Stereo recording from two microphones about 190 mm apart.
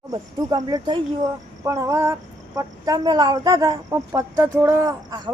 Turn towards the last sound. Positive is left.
turn(degrees=-20)  # may be behind; listen again after turning